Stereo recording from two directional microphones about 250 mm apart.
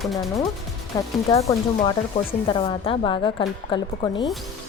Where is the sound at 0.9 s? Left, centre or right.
Centre.